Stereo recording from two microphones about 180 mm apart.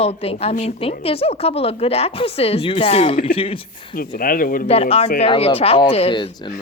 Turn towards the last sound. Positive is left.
turn(degrees=25)  # may be behind; listen again after turning